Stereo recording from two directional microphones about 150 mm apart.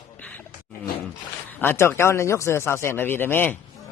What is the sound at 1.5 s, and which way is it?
Speech, 15° left (ahead or behind).